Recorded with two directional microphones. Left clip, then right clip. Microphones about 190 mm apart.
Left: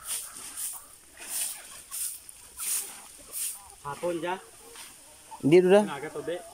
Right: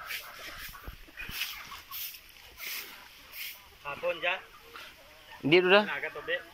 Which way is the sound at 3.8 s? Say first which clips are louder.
Even; 75° left (ahead or behind).